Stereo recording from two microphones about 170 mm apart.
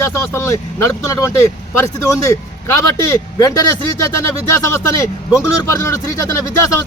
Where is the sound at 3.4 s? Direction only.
20° left (ahead or behind).